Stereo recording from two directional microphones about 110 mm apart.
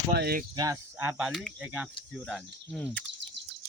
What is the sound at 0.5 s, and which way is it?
Speech, 30° right (ahead or behind).